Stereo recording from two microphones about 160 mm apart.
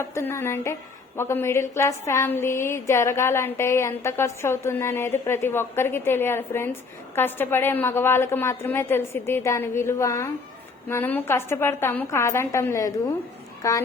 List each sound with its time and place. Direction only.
0.0 s a woman's voice: 15° left (ahead or behind)